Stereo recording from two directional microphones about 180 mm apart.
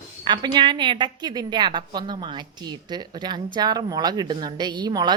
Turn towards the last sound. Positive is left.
turn(degrees=-25)  # may be behind; listen again after turning